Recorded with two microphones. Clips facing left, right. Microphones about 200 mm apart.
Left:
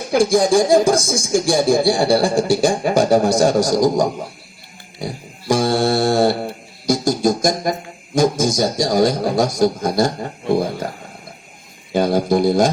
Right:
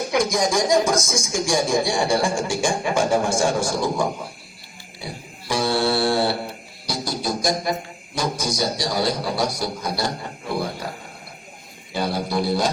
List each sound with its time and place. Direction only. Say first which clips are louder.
0.1 s speech: left 8 dB; 30° left (ahead or behind)
4.9 s mantra: left 7 dB; 45° left (ahead or behind)
6.8 s music: left 10 dB; 45° left (ahead or behind)
8.1 s a man's voice: left 9 dB; 45° left (ahead or behind)
11.9 s a man's voice: left 9 dB; 45° left (ahead or behind)